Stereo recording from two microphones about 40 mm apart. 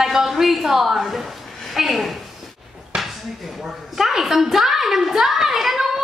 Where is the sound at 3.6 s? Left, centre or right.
Centre.